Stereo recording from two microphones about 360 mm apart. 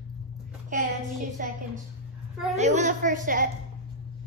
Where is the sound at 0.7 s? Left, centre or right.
Right.